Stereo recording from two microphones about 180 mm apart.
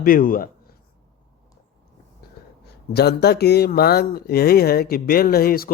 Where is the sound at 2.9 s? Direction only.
65° left (ahead or behind).